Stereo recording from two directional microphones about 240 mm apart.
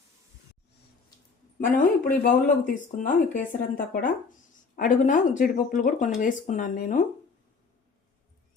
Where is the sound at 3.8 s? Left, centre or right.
Left.